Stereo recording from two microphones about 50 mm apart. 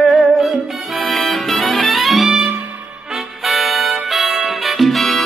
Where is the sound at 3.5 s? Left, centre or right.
Centre.